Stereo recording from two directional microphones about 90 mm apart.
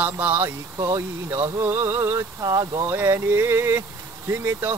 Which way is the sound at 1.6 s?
30° right (ahead or behind).